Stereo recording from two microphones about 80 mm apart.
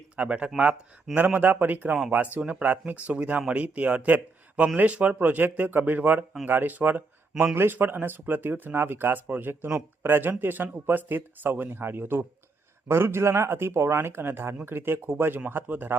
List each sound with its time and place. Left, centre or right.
0.2 s speech: centre